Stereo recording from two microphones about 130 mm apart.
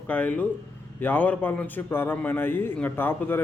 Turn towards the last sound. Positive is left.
turn(degrees=15)  # may be behind; listen again after turning